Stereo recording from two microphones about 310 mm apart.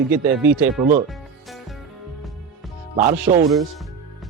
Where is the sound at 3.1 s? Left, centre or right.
Centre.